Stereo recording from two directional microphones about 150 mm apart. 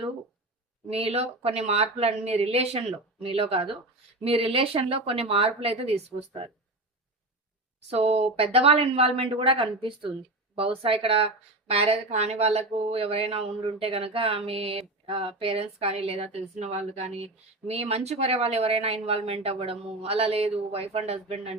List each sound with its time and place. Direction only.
0.9 s speech: 40° right (ahead or behind)
7.9 s speech: 45° right (ahead or behind)